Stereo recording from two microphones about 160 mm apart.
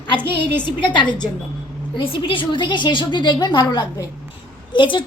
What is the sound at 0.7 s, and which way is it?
A woman's voice, 30° left (ahead or behind).